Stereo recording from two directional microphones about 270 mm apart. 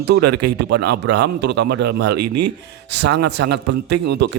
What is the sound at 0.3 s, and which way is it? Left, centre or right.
Speech, right.